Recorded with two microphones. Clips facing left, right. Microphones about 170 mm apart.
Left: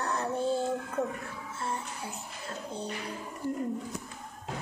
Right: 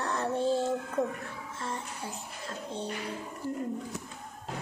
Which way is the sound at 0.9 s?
35° right (ahead or behind).